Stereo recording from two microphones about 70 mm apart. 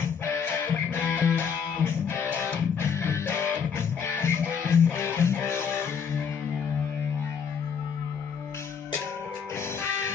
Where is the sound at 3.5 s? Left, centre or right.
Left.